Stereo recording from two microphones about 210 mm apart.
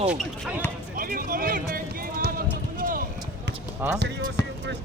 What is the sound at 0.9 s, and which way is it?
Speech, 45° right (ahead or behind).